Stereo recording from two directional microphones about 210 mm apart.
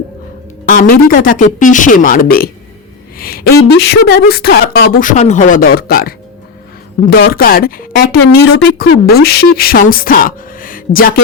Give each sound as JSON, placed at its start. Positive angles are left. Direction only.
{"t": 0.7, "sound": "a woman's voice", "side_deg": 40}